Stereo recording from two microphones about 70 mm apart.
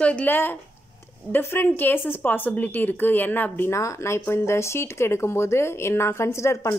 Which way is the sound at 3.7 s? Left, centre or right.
Left.